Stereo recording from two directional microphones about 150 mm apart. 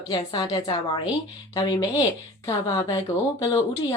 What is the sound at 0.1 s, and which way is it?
A woman's voice, 30° left (ahead or behind).